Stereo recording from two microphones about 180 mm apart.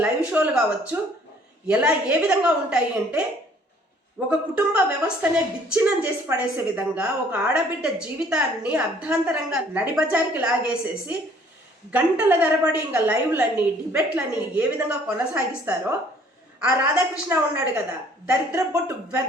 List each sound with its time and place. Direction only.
0.0 s a woman's voice: 5° right (ahead or behind)
4.3 s a woman's voice: 5° right (ahead or behind)